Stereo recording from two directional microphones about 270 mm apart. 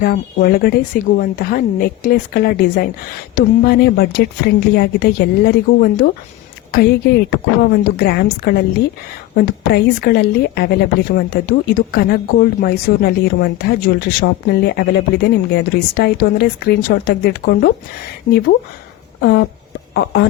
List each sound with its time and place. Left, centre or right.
0.0 s speech: left
7.3 s speech: left